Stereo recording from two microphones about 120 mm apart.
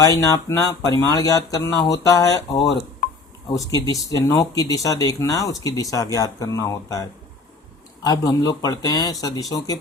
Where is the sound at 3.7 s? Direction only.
30° left (ahead or behind).